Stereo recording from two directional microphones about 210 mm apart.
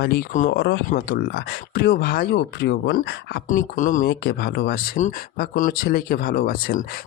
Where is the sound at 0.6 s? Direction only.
55° left (ahead or behind).